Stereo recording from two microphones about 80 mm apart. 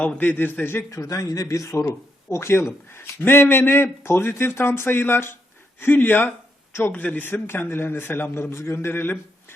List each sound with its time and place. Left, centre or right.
0.0 s a man's voice: centre
0.9 s a man's voice: left